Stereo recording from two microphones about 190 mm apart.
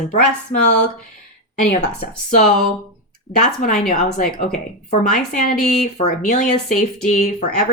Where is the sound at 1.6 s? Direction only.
40° left (ahead or behind).